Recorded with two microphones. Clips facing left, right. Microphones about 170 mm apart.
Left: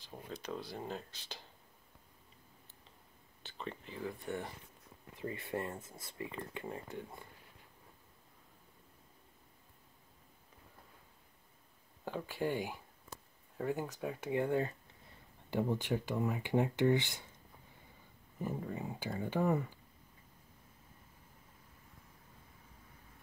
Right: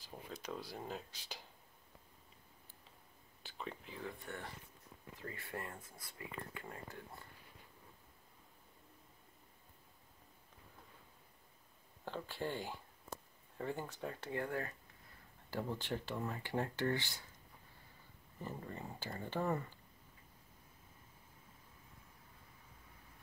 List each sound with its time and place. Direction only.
0.0 s speech: centre (ahead or behind)
3.4 s speech: 5° right (ahead or behind)
5.2 s speech: 20° left (ahead or behind)
12.0 s speech: 10° left (ahead or behind)
18.4 s speech: 5° left (ahead or behind)